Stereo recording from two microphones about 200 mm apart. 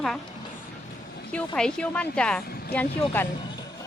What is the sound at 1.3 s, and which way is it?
Speech, 5° left (ahead or behind).